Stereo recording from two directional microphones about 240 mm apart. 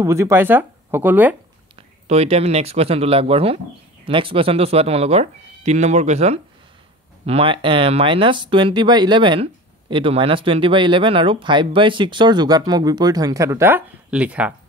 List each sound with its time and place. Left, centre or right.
0.0 s speech: centre
1.8 s speech: right; by 14.5 s centre